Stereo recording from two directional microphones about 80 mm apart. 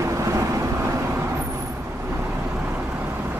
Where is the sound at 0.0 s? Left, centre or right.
Right.